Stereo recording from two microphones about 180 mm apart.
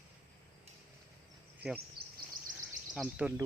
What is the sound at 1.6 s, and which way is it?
Speech, 65° right (ahead or behind).